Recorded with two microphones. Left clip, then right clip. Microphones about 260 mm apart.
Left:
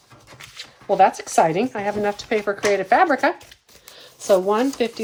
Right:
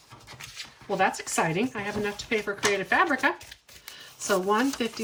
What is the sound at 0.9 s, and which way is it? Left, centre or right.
Speech, centre.